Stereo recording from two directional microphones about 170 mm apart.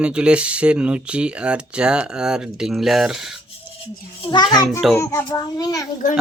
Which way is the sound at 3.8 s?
30° left (ahead or behind).